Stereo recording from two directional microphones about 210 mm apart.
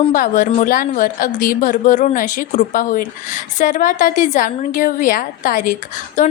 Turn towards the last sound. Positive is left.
turn(degrees=35)  # may be behind; listen again after turning